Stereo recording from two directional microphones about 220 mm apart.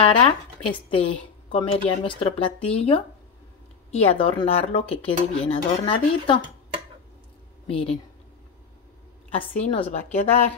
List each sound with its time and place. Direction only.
0.0 s a woman's voice: 25° left (ahead or behind)
7.6 s a woman's voice: 25° left (ahead or behind)
9.3 s a woman's voice: 25° left (ahead or behind)